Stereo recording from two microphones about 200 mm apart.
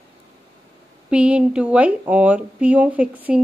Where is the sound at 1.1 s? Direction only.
5° right (ahead or behind).